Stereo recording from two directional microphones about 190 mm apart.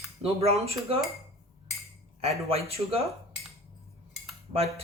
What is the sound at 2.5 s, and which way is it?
Speech, 30° right (ahead or behind).